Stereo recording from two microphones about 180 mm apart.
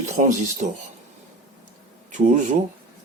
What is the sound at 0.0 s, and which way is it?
Speech, 40° right (ahead or behind).